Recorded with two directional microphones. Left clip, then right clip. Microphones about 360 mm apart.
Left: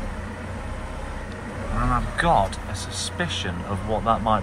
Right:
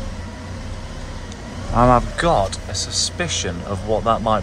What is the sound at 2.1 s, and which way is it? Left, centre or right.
Speech, centre.